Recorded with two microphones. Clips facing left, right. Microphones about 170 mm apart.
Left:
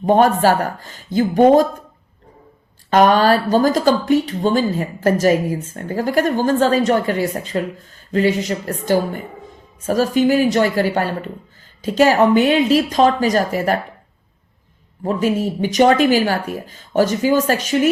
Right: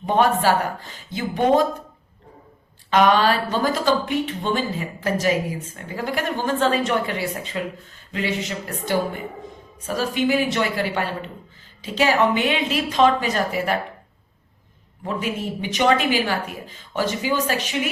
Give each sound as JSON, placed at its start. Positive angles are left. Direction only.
{"t": 0.0, "sound": "speech", "side_deg": 45}
{"t": 2.9, "sound": "a woman's voice", "side_deg": 45}
{"t": 15.0, "sound": "speech", "side_deg": 40}